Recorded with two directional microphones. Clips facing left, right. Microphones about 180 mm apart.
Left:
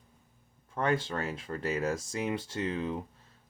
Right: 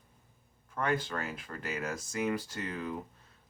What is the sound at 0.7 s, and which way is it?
Speech, 30° left (ahead or behind).